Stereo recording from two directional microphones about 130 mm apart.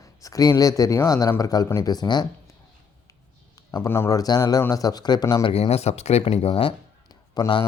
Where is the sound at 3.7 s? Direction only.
20° left (ahead or behind).